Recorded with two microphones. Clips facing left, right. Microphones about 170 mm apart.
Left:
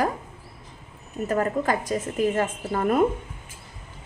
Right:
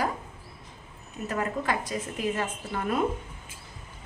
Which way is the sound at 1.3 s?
45° left (ahead or behind).